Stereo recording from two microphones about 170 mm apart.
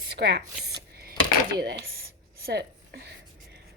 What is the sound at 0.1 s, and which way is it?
Chopping, 80° right.